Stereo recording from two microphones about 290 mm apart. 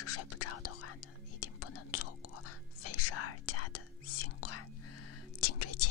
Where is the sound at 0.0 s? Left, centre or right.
Left.